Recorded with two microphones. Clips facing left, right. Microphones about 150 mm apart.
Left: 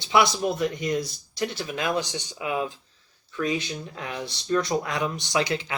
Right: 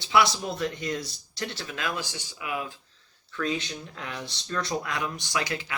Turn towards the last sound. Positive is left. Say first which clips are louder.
# left 5 dB
turn(degrees=20)  # may be behind; listen again after turning